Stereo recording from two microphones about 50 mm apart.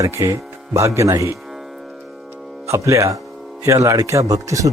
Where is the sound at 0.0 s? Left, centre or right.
Right.